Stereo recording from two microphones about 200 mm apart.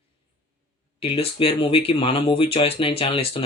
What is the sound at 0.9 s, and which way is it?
Speech, 30° left (ahead or behind).